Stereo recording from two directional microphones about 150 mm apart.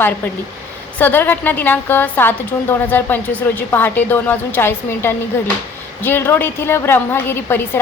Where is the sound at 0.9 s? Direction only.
15° left (ahead or behind).